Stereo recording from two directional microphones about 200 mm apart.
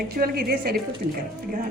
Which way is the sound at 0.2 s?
50° right (ahead or behind).